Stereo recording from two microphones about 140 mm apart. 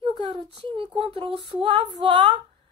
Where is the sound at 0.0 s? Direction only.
35° right (ahead or behind).